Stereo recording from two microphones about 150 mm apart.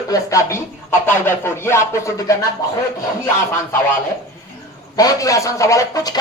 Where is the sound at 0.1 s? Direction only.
20° left (ahead or behind).